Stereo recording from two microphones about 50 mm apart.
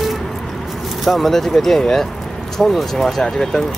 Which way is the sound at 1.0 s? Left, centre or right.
Centre.